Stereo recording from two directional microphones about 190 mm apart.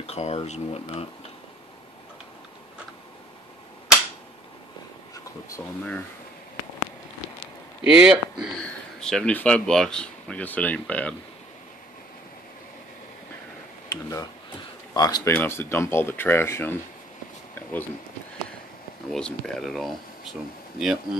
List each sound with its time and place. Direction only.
0.0 s speech: 35° left (ahead or behind)
5.1 s speech: 15° left (ahead or behind)
7.8 s speech: 5° right (ahead or behind)
13.8 s speech: 15° left (ahead or behind)
17.6 s a sound: 10° left (ahead or behind)
19.0 s speech: 5° left (ahead or behind)